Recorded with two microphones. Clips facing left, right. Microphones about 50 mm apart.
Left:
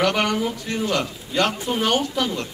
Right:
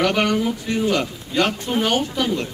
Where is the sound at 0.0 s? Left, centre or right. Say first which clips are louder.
Right 2 dB; centre.